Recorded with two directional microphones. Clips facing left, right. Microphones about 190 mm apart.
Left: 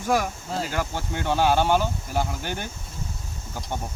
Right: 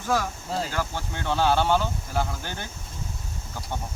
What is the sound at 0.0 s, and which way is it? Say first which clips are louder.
Speech: left 2 dB; 15° left (ahead or behind).